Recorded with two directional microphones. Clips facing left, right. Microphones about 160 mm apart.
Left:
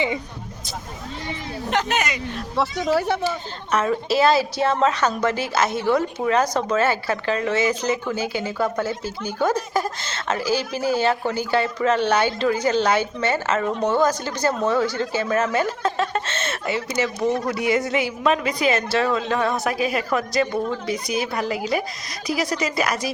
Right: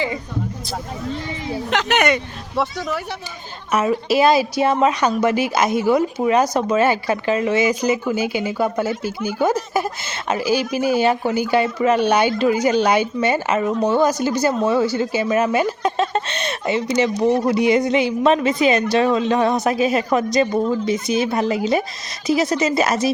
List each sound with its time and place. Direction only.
1.7 s speech: 85° right; by 2.2 s 65° right (ahead or behind)
3.2 s a woman's voice: 10° right (ahead or behind); by 23.0 s 25° right (ahead or behind)